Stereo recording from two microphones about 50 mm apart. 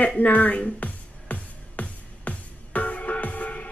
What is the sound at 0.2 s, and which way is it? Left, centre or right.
Music, left.